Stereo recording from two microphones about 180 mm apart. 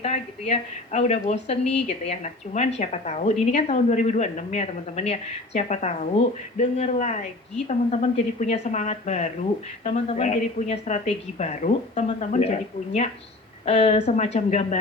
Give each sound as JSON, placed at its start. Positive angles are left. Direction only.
{"t": 0.0, "sound": "a woman's voice", "side_deg": 40}